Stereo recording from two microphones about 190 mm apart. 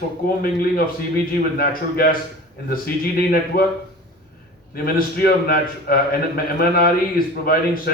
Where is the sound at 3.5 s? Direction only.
50° left (ahead or behind).